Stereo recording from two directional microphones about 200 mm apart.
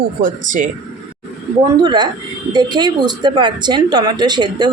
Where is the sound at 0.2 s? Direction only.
45° right (ahead or behind).